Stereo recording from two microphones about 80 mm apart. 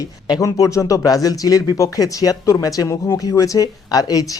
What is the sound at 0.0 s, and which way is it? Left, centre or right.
Speech, left.